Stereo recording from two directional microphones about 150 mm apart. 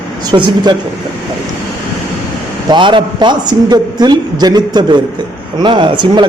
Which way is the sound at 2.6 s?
30° right (ahead or behind).